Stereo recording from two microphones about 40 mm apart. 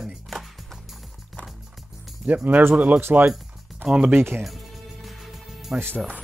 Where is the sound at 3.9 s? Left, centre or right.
Right.